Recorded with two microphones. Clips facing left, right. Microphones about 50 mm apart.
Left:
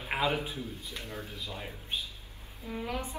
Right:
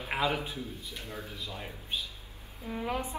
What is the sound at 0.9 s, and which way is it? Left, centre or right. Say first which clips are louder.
Speech: left 1 dB; left.